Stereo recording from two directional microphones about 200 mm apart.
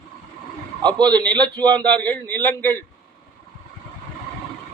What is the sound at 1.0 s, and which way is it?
A man's voice, 5° left (ahead or behind).